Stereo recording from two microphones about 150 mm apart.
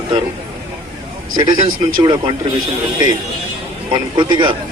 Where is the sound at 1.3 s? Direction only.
30° right (ahead or behind).